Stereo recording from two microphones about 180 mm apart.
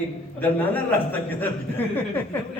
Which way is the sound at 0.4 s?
10° left (ahead or behind).